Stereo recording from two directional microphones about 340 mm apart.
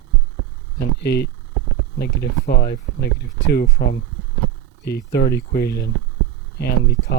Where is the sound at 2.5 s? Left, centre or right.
Left.